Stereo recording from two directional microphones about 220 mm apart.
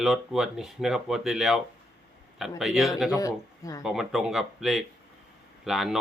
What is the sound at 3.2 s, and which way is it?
Speech, 15° left (ahead or behind).